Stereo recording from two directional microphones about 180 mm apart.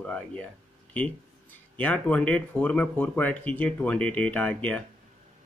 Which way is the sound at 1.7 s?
10° left (ahead or behind).